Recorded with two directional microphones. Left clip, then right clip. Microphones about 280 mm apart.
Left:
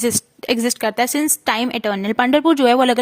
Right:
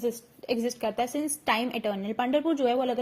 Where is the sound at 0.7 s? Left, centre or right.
Left.